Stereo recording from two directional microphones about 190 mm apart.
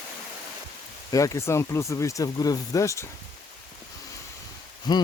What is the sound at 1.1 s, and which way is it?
Speech, 15° left (ahead or behind).